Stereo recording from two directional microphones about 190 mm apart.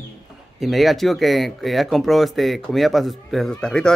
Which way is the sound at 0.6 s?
Centre (ahead or behind).